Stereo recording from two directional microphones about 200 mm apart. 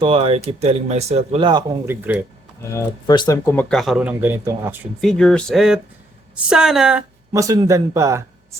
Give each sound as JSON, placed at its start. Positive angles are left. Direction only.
{"t": 0.0, "sound": "speech", "side_deg": -25}
{"t": 1.9, "sound": "speech", "side_deg": -10}
{"t": 2.6, "sound": "speech", "side_deg": 15}
{"t": 4.9, "sound": "speech", "side_deg": 5}
{"t": 7.3, "sound": "speech", "side_deg": -15}